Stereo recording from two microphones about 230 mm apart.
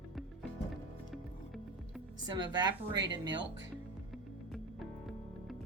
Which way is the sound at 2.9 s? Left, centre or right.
Right.